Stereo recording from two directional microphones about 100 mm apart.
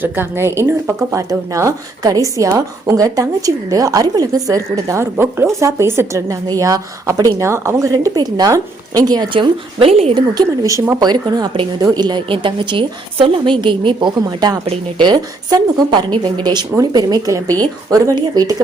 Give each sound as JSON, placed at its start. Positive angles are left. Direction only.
{"t": 0.0, "sound": "speech", "side_deg": -20}
{"t": 5.1, "sound": "speech", "side_deg": -25}
{"t": 10.3, "sound": "a woman's voice", "side_deg": -40}
{"t": 12.3, "sound": "a woman's voice", "side_deg": -55}
{"t": 14.3, "sound": "speech", "side_deg": -40}
{"t": 14.9, "sound": "a woman's voice", "side_deg": -50}